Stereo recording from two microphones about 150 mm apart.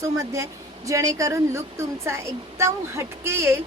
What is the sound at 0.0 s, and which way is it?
A woman's voice, 20° right (ahead or behind).